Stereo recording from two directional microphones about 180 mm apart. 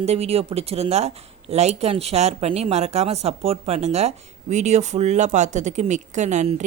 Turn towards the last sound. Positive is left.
turn(degrees=-40)  # may be behind; listen again after turning